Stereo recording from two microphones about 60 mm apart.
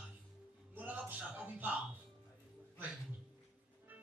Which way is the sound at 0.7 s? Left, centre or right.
Right.